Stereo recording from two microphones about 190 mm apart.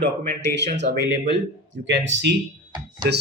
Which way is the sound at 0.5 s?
65° right (ahead or behind).